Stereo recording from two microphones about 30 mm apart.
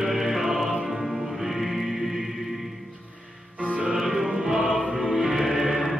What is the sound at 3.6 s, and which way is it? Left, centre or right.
Music, right.